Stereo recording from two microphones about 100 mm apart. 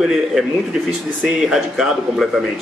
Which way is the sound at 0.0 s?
5° right (ahead or behind).